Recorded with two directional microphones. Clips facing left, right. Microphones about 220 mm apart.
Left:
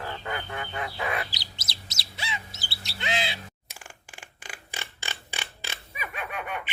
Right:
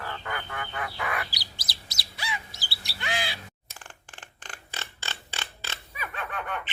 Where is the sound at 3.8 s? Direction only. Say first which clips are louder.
Even; 10° left (ahead or behind).